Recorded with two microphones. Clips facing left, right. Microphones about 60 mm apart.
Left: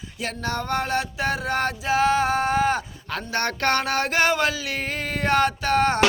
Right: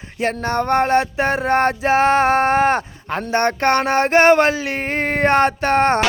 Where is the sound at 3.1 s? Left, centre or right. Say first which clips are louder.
Right 8 dB; right.